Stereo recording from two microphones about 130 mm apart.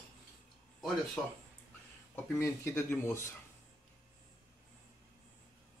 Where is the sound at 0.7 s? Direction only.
Centre (ahead or behind).